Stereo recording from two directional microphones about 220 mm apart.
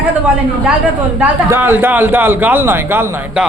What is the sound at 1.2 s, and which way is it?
A man's voice, 10° right (ahead or behind).